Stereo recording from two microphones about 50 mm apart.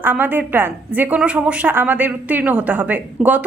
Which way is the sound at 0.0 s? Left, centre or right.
Right.